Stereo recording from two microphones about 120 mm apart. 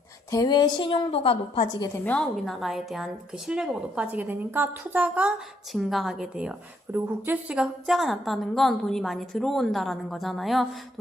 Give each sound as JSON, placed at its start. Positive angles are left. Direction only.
{"t": 0.3, "sound": "a woman's voice", "side_deg": 30}
{"t": 2.3, "sound": "a woman's voice", "side_deg": 0}
{"t": 5.7, "sound": "a woman's voice", "side_deg": 0}